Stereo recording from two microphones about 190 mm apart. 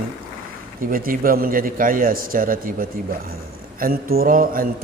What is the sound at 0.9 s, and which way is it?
A man's voice, 50° right (ahead or behind).